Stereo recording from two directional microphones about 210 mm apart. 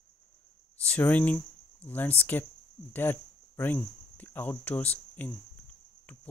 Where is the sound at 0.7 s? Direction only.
5° left (ahead or behind).